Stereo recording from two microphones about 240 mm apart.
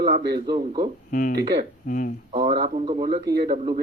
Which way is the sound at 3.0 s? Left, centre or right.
Right.